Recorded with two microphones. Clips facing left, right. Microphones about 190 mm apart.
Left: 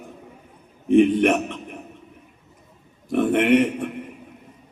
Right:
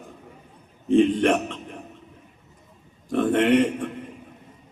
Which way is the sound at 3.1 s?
15° left (ahead or behind).